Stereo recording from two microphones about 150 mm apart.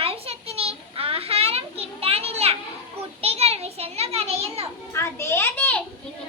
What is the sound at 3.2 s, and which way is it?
Children playing, 40° right (ahead or behind).